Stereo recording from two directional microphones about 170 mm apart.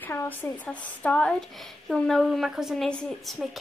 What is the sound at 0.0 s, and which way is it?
Speech, 10° left (ahead or behind).